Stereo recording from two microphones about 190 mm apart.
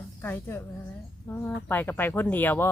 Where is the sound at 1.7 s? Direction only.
10° left (ahead or behind).